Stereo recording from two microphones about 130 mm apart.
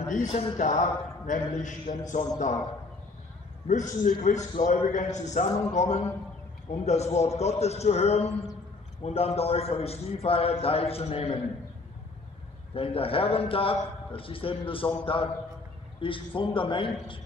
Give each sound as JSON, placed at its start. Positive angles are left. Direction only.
{"t": 0.1, "sound": "a man's voice", "side_deg": 60}
{"t": 0.6, "sound": "a man's voice", "side_deg": 70}
{"t": 3.6, "sound": "a man's voice", "side_deg": 70}
{"t": 12.7, "sound": "a man's voice", "side_deg": 45}